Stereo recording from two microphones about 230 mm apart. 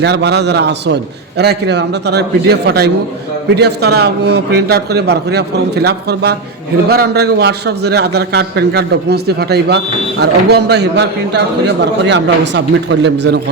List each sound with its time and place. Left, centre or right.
0.0 s a man's voice: right